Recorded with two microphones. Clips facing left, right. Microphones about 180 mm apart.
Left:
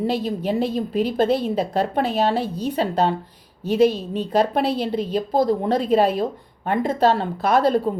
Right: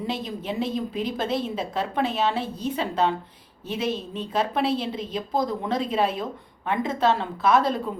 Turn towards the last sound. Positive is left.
turn(degrees=35)  # may be behind; listen again after turning